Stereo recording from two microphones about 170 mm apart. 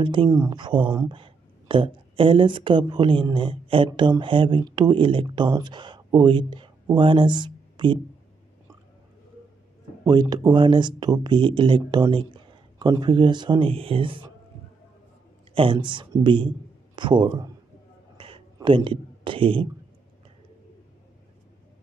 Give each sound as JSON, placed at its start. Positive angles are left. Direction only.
{"t": 0.0, "sound": "speech", "side_deg": -30}
{"t": 10.3, "sound": "speech", "side_deg": -25}
{"t": 15.5, "sound": "a man's voice", "side_deg": -30}
{"t": 18.1, "sound": "a sound", "side_deg": -30}